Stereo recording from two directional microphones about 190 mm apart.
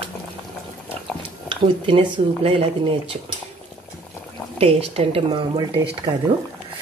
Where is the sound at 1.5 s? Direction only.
25° right (ahead or behind).